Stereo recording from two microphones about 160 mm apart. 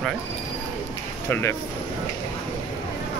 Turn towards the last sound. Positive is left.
turn(degrees=15)  # may be behind; listen again after turning